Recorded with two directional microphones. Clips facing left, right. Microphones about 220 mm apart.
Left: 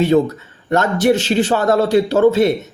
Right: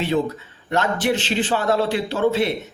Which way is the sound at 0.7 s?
45° left (ahead or behind).